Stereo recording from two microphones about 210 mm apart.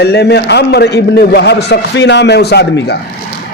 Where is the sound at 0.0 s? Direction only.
55° left (ahead or behind).